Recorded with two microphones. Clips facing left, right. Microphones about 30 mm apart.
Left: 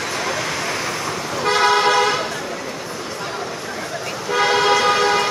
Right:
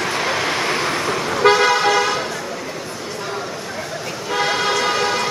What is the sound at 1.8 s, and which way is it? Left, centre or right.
Vehicle, centre.